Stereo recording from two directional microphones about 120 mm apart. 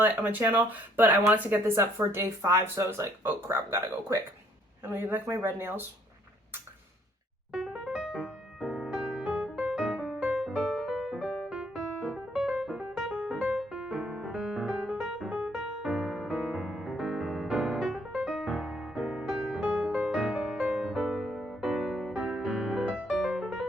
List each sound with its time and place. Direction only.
0.0 s speech: 15° right (ahead or behind)
7.5 s music: 5° right (ahead or behind)